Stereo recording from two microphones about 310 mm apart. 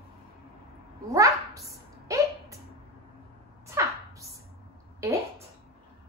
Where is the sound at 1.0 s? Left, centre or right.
Centre.